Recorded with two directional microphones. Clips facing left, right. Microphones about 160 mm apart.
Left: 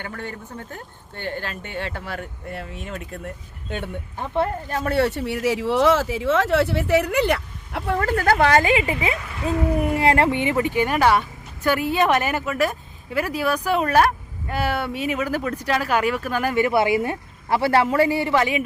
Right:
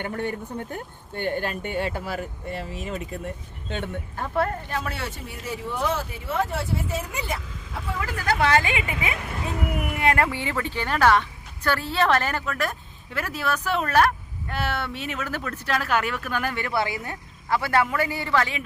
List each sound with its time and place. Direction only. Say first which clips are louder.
0.0 s speech: right 4 dB; 20° right (ahead or behind); by 3.3 s centre (ahead or behind)
3.7 s speech: left 1 dB; 10° left (ahead or behind)
4.7 s speech: left 5 dB; 45° left (ahead or behind)
4.9 s speech: left 13 dB; 70° left (ahead or behind); by 18.6 s 15° left (ahead or behind)